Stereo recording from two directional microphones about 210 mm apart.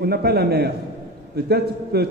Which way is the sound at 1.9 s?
50° right (ahead or behind).